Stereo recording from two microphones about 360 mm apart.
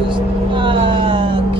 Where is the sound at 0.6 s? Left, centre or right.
Centre.